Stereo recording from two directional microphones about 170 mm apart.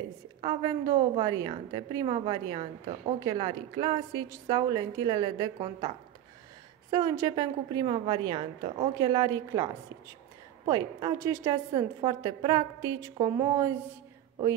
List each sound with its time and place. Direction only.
0.4 s a woman's voice: 25° right (ahead or behind)
6.9 s a woman's voice: 25° right (ahead or behind)
10.7 s a woman's voice: 25° right (ahead or behind)